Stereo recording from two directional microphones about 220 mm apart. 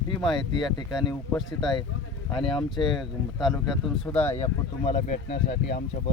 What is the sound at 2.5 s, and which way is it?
Speech, centre (ahead or behind).